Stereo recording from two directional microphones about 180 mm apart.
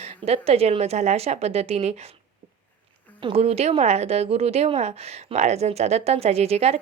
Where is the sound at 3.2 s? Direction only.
35° right (ahead or behind).